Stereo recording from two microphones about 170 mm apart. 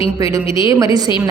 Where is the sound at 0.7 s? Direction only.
20° right (ahead or behind).